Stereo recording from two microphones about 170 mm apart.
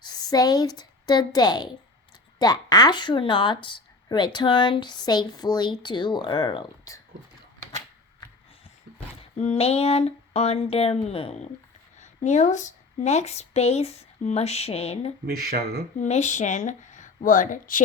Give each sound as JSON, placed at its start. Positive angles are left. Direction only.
{"t": 0.0, "sound": "a woman's voice", "side_deg": 25}
{"t": 9.4, "sound": "a woman's voice", "side_deg": 40}
{"t": 15.3, "sound": "speech", "side_deg": -60}
{"t": 16.0, "sound": "speech", "side_deg": 45}